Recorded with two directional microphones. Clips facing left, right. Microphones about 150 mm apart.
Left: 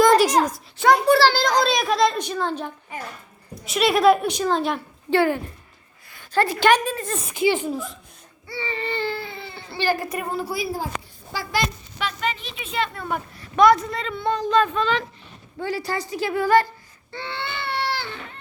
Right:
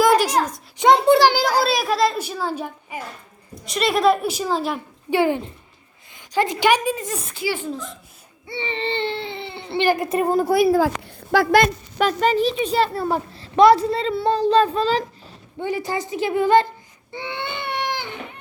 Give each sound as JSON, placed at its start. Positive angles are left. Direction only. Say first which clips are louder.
{"t": 0.0, "sound": "a sound", "louder": "left 1 dB", "side_deg": -5}
{"t": 0.3, "sound": "speech", "louder": "left 1 dB", "side_deg": 10}
{"t": 0.8, "sound": "a child's voice", "louder": "right 2 dB", "side_deg": -25}
{"t": 3.7, "sound": "a woman's voice", "louder": "left 1 dB", "side_deg": 0}
{"t": 5.1, "sound": "a child's voice", "louder": "right 1 dB", "side_deg": -15}
{"t": 7.3, "sound": "a child's voice", "louder": "left 6 dB", "side_deg": 20}
{"t": 7.7, "sound": "speech", "louder": "left 1 dB", "side_deg": 10}
{"t": 8.4, "sound": "speech", "louder": "right 3 dB", "side_deg": -25}
{"t": 10.3, "sound": "speech", "louder": "right 12 dB", "side_deg": -50}
{"t": 10.8, "sound": "a child's voice", "louder": "right 10 dB", "side_deg": -80}
{"t": 15.5, "sound": "speech", "louder": "right 2 dB", "side_deg": -20}
{"t": 17.1, "sound": "baby cry", "louder": "right 2 dB", "side_deg": -15}